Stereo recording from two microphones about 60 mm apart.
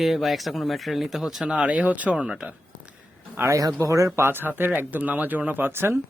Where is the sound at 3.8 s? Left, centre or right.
Right.